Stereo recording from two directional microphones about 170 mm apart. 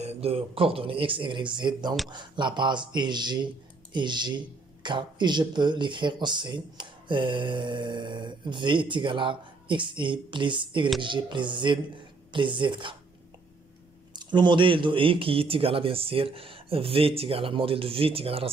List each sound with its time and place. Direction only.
0.0 s speech: 35° right (ahead or behind)
14.1 s speech: 25° right (ahead or behind)